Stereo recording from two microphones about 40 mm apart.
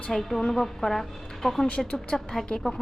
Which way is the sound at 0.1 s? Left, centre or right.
Centre.